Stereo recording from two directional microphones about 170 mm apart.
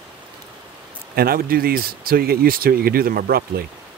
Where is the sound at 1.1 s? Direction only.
65° right (ahead or behind).